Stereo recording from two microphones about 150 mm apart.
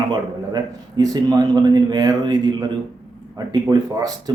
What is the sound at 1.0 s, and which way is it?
A man's voice, 25° right (ahead or behind).